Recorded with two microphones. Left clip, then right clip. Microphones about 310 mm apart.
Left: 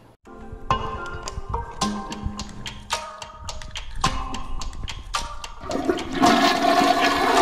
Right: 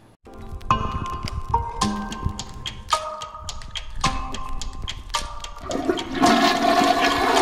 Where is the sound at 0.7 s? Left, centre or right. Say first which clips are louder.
Right 2 dB; centre.